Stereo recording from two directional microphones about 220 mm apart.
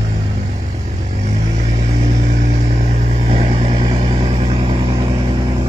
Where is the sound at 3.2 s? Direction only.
30° right (ahead or behind).